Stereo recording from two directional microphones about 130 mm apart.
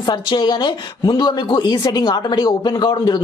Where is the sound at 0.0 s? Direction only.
35° left (ahead or behind).